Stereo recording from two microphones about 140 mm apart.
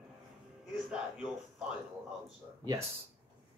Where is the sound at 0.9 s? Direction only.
5° right (ahead or behind).